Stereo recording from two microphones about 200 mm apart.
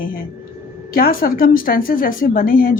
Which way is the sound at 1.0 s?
45° left (ahead or behind).